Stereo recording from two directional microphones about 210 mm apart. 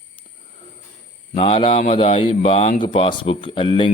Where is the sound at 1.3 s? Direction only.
25° left (ahead or behind).